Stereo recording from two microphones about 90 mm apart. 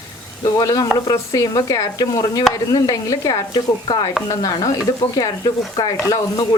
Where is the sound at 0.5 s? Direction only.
45° left (ahead or behind).